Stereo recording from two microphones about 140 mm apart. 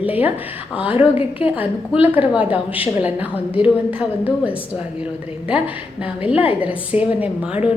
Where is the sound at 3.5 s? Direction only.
40° left (ahead or behind).